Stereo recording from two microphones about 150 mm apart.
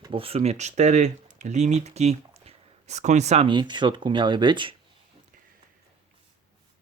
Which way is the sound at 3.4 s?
30° right (ahead or behind).